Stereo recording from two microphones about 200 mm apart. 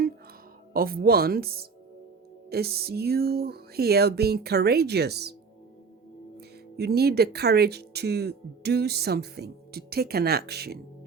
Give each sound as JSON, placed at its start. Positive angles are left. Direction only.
{"t": 0.7, "sound": "speech", "side_deg": -45}
{"t": 6.7, "sound": "speech", "side_deg": -55}